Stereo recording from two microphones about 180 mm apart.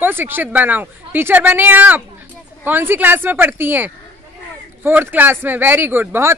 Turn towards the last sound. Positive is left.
turn(degrees=-15)  # may be behind; listen again after turning